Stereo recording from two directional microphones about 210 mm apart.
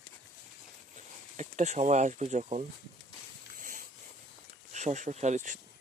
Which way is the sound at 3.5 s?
40° right (ahead or behind).